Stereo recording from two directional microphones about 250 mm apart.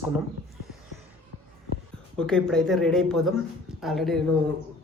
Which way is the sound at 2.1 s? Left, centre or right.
Centre.